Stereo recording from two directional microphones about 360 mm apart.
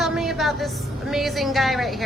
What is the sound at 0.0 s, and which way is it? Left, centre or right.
A woman's voice, centre.